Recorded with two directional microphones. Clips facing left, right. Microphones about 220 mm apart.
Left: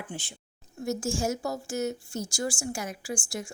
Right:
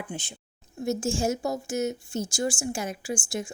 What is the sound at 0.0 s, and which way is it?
A woman's voice, 20° right (ahead or behind).